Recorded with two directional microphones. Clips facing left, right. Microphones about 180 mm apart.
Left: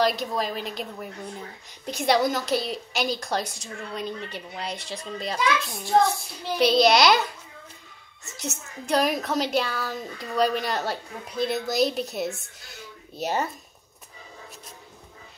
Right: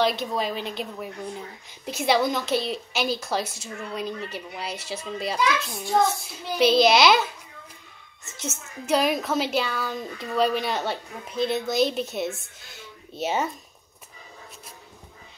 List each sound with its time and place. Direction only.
0.0 s a woman's voice: centre (ahead or behind)